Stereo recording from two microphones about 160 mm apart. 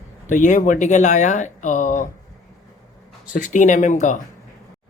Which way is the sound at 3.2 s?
55° left (ahead or behind).